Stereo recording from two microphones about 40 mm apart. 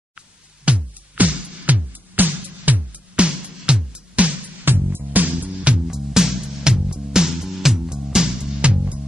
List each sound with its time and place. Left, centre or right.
0.7 s music: right
3.2 s music: right
4.6 s music: right
5.1 s music: right
5.9 s music: centre
8.5 s music: right